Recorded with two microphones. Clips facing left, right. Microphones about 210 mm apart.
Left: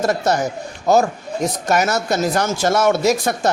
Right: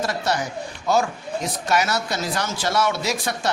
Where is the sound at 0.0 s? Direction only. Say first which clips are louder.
Left 6 dB; 45° left (ahead or behind).